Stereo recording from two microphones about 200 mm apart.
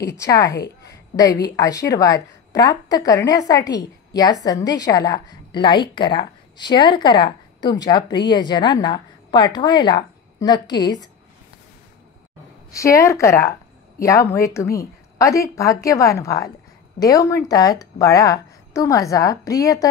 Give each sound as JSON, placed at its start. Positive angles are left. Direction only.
{"t": 0.0, "sound": "a woman's voice", "side_deg": 15}
{"t": 12.7, "sound": "a woman's voice", "side_deg": 15}